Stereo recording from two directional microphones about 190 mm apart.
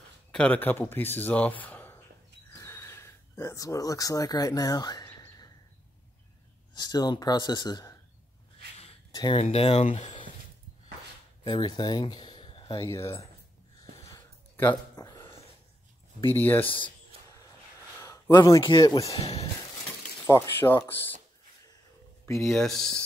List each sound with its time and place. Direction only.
0.3 s speech: 5° left (ahead or behind)
2.5 s a sound: 15° left (ahead or behind)
6.7 s speech: 20° left (ahead or behind)
9.1 s speech: 20° left (ahead or behind)
9.4 s speech: 30° left (ahead or behind)
11.4 s speech: 20° left (ahead or behind)
12.8 s speech: 15° left (ahead or behind)
14.6 s a sound: 15° left (ahead or behind)
16.3 s speech: 10° left (ahead or behind)
18.3 s speech: 20° left (ahead or behind)
20.2 s speech: 15° left (ahead or behind)
22.2 s a sound: 15° left (ahead or behind)
22.5 s speech: centre (ahead or behind)